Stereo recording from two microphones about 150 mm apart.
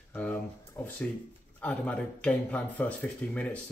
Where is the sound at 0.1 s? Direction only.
10° left (ahead or behind).